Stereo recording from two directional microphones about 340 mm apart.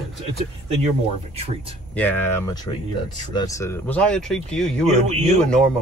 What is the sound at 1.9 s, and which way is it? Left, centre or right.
Speech, centre.